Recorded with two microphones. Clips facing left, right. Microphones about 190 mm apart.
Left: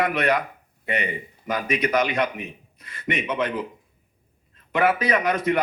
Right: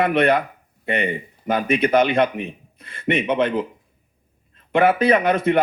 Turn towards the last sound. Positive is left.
turn(degrees=-30)  # may be behind; listen again after turning